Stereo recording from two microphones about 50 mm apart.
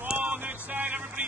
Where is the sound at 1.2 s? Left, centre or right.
Right.